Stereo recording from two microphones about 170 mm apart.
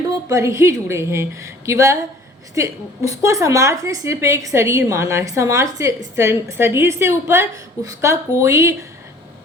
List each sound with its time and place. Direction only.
0.1 s a woman's voice: 20° right (ahead or behind)